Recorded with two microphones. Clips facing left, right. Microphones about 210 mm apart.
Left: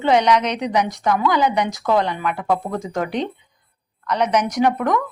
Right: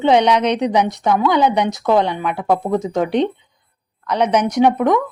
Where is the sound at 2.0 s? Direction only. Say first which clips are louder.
Right 3 dB; centre (ahead or behind).